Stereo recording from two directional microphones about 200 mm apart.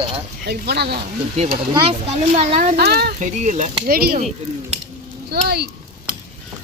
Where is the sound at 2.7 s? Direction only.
50° right (ahead or behind).